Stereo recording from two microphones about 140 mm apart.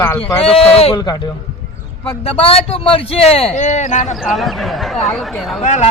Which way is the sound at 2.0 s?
45° left (ahead or behind).